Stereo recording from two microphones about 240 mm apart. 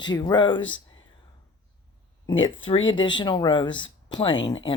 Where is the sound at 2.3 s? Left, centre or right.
Left.